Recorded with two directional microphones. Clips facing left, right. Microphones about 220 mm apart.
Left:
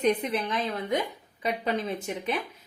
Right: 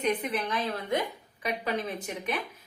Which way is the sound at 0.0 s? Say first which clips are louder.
Left 3 dB; 30° left (ahead or behind).